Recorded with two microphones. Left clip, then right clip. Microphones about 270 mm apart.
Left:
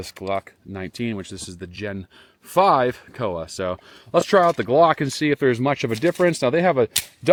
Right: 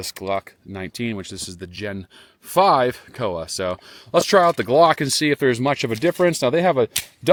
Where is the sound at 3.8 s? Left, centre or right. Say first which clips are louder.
Right 1 dB; centre.